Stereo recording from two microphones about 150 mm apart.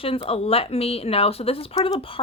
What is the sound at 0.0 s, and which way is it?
Speech, 40° left (ahead or behind).